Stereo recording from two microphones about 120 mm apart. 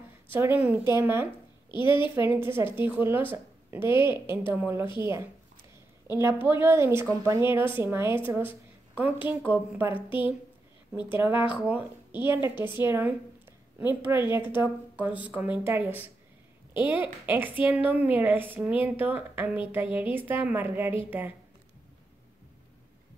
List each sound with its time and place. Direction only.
0.3 s a woman's voice: 15° right (ahead or behind)
1.7 s a woman's voice: 45° left (ahead or behind)
2.2 s a woman's voice: 20° right (ahead or behind)
6.4 s a woman's voice: 20° right (ahead or behind)
11.1 s a woman's voice: 15° right (ahead or behind)